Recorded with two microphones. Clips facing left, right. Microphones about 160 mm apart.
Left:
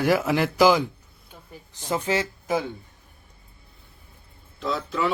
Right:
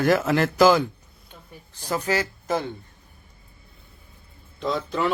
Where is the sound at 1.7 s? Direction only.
20° left (ahead or behind).